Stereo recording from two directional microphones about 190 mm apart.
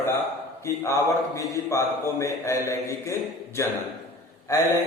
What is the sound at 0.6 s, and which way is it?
A man's voice, 15° left (ahead or behind).